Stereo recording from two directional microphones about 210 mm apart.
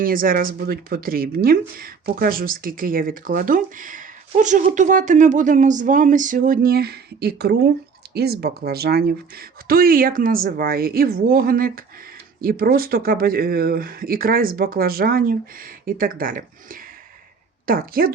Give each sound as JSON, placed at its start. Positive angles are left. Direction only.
{"t": 0.0, "sound": "speech", "side_deg": -40}
{"t": 17.7, "sound": "speech", "side_deg": -45}